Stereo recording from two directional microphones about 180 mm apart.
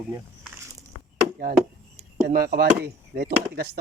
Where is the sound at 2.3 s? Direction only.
55° right (ahead or behind).